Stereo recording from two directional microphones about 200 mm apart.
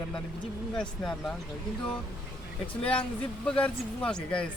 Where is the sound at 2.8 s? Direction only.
5° left (ahead or behind).